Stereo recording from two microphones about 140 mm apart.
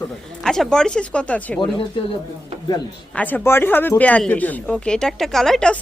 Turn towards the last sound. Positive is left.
turn(degrees=5)  # may be behind; listen again after turning